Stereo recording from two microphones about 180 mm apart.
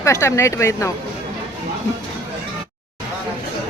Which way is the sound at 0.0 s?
15° left (ahead or behind).